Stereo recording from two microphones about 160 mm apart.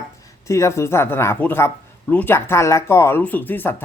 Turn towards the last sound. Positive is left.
turn(degrees=15)  # may be behind; listen again after turning